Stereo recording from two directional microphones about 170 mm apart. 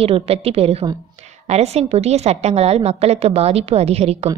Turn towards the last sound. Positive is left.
turn(degrees=-35)  # may be behind; listen again after turning